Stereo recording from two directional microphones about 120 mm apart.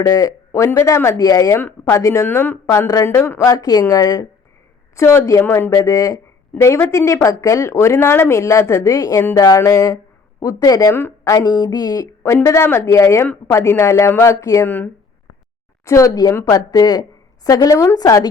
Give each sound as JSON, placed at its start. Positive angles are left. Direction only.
{"t": 0.0, "sound": "a woman's voice", "side_deg": 25}